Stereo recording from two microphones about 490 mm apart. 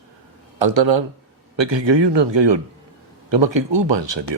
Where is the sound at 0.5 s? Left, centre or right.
Right.